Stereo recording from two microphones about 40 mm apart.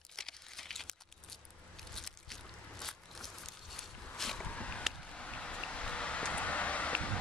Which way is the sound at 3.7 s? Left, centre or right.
Centre.